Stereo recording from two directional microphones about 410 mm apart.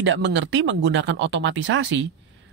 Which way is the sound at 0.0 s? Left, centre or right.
Right.